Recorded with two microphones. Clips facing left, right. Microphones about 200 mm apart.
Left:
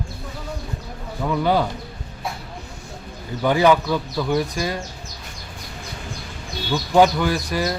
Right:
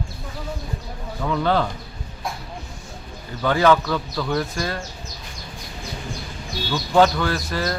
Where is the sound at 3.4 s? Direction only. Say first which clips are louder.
Left 1 dB; 15° left (ahead or behind).